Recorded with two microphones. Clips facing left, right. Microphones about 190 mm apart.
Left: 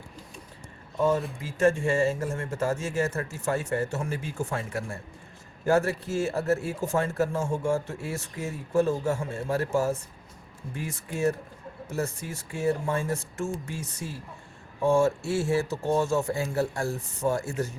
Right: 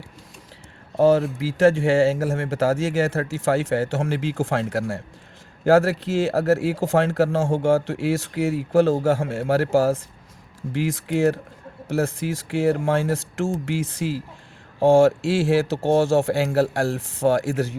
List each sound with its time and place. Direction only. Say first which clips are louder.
0.9 s speech: right 8 dB; 90° right